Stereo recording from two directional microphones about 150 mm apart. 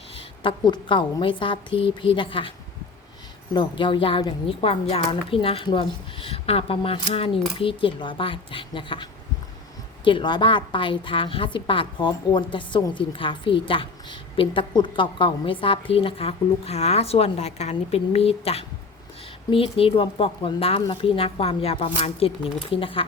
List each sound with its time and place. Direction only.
0.2 s a woman's voice: 30° left (ahead or behind)
3.5 s a woman's voice: 30° left (ahead or behind)